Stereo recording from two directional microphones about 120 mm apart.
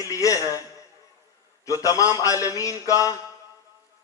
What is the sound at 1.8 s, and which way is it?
A man's voice, 30° left (ahead or behind).